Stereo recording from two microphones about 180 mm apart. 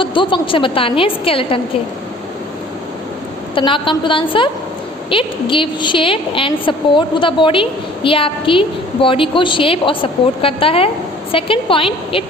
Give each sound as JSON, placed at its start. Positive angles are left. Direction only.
{"t": 0.0, "sound": "a woman's voice", "side_deg": 25}
{"t": 3.5, "sound": "a woman's voice", "side_deg": 30}